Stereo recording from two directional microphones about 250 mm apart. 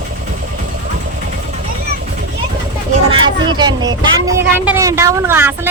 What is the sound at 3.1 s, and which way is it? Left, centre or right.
Vehicle, centre.